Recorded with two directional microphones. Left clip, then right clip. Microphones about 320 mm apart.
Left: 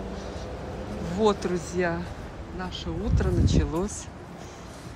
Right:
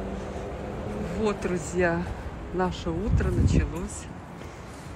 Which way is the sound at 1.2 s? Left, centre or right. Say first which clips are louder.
Left 5 dB; centre.